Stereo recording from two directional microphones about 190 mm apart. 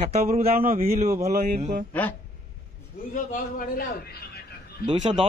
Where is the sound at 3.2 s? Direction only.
45° left (ahead or behind).